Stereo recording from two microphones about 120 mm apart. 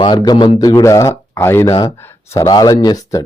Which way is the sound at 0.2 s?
35° left (ahead or behind).